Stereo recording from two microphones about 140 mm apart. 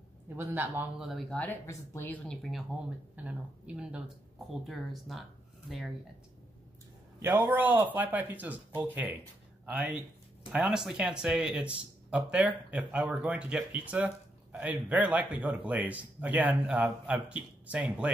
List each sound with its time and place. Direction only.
0.4 s speech: 15° right (ahead or behind)
0.9 s speech: centre (ahead or behind)
1.7 s a woman's voice: 15° left (ahead or behind)
2.2 s speech: 5° left (ahead or behind)
3.2 s speech: 10° right (ahead or behind)
7.2 s speech: 15° right (ahead or behind)